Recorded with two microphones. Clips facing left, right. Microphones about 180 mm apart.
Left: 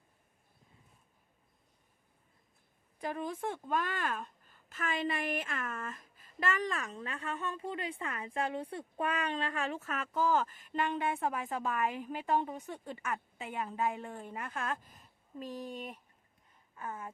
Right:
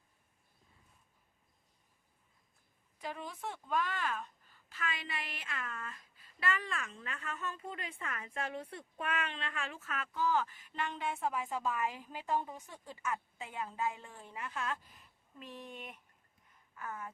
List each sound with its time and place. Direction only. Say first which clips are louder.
3.0 s a woman's voice: left 6 dB; 50° left (ahead or behind); by 17.1 s 25° left (ahead or behind)